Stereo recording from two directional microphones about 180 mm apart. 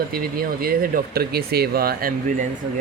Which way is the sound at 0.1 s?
55° right (ahead or behind).